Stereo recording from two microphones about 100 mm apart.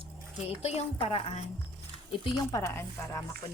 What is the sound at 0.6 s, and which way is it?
Speech, 90° left.